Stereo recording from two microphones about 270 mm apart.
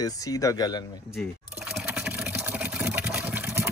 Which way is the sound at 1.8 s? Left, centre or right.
Centre.